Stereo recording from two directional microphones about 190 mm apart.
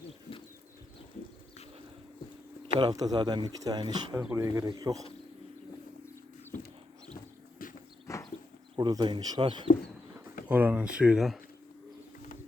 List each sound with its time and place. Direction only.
2.7 s speech: 20° right (ahead or behind)
4.2 s speech: 10° right (ahead or behind)
7.6 s clip-clop: 50° left (ahead or behind)
8.1 s horse: 15° left (ahead or behind)
8.7 s speech: 20° right (ahead or behind)
10.5 s speech: 10° right (ahead or behind)